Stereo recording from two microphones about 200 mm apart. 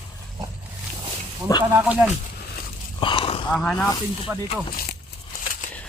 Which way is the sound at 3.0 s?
25° left (ahead or behind).